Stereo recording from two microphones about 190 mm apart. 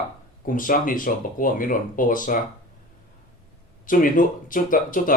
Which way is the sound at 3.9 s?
45° left (ahead or behind).